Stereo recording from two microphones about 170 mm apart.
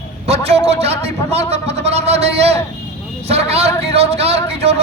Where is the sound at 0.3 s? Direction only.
40° right (ahead or behind).